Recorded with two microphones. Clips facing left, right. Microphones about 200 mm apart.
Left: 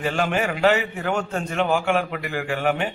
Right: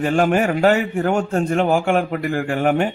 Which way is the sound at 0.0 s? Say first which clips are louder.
Right 6 dB; 45° right (ahead or behind).